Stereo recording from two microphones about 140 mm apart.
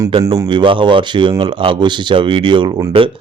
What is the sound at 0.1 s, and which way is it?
Speech, 40° right (ahead or behind).